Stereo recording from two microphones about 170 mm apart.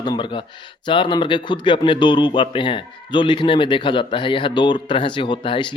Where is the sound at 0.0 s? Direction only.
25° left (ahead or behind).